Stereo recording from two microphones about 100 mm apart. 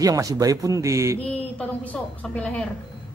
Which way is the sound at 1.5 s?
15° left (ahead or behind).